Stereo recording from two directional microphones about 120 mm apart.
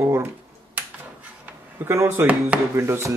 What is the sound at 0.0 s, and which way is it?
Finger snapping, 20° right (ahead or behind).